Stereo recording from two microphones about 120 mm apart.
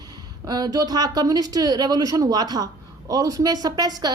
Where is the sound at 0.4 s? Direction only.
30° right (ahead or behind).